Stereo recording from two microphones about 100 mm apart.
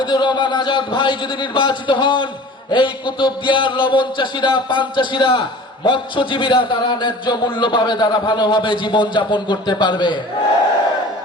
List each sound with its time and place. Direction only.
0.0 s speech: 50° left (ahead or behind)